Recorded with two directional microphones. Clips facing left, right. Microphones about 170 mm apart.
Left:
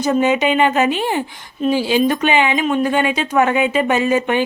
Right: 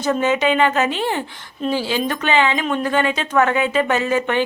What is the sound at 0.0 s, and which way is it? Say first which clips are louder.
A woman's voice: left 2 dB; 15° left (ahead or behind).